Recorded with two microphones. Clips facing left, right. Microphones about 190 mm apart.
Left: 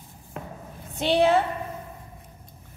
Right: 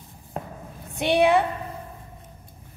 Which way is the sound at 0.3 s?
35° right (ahead or behind).